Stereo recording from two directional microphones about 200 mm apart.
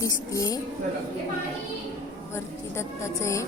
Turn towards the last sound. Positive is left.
turn(degrees=15)  # may be behind; listen again after turning